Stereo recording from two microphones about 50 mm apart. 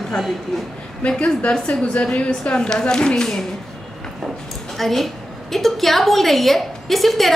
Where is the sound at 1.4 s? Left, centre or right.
Left.